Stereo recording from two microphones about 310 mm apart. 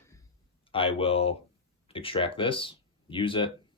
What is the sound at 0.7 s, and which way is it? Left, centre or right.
Speech, centre.